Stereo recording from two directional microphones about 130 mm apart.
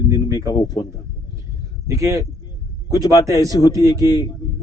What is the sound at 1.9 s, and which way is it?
Speech, 25° right (ahead or behind).